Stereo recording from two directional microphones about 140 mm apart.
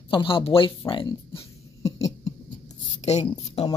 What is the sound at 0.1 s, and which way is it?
A woman's voice, 40° left (ahead or behind).